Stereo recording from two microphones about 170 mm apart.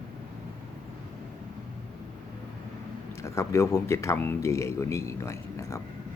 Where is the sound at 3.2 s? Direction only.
15° left (ahead or behind).